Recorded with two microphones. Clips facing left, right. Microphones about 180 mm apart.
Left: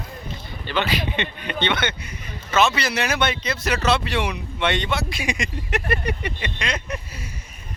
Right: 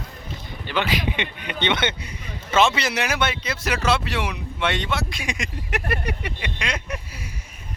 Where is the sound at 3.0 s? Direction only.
10° right (ahead or behind).